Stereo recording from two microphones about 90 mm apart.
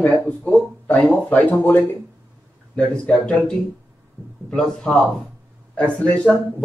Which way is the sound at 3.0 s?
10° left (ahead or behind).